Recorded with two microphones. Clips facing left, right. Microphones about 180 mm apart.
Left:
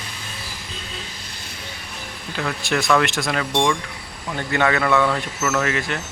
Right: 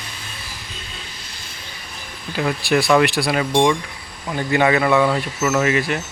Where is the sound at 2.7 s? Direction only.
15° right (ahead or behind).